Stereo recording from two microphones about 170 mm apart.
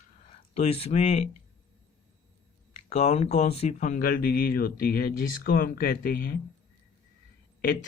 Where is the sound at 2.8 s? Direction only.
35° left (ahead or behind); by 6.4 s 60° left (ahead or behind).